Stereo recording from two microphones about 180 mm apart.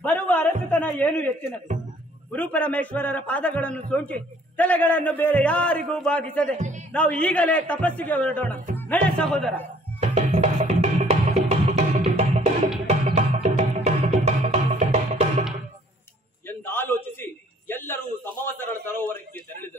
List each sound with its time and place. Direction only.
0.0 s a sound: 10° left (ahead or behind)
2.3 s a man's voice: 10° left (ahead or behind)
6.5 s speech: 40° right (ahead or behind)
6.9 s a man's voice: 5° left (ahead or behind)
9.9 s music: 40° right (ahead or behind)
16.4 s a sound: 10° left (ahead or behind)